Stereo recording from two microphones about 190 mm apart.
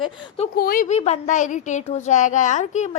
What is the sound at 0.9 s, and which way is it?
A woman's voice, 35° left (ahead or behind).